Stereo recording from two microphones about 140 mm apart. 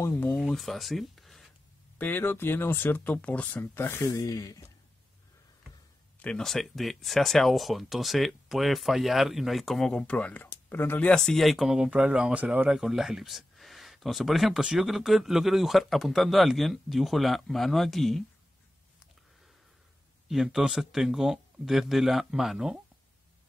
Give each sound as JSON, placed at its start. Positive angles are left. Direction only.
{"t": 0.0, "sound": "speech", "side_deg": 15}
{"t": 0.4, "sound": "speech", "side_deg": 0}
{"t": 2.0, "sound": "speech", "side_deg": 15}
{"t": 6.1, "sound": "speech", "side_deg": 5}
{"t": 20.2, "sound": "speech", "side_deg": -5}